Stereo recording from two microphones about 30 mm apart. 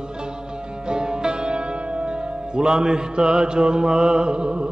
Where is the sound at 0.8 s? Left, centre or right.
Right.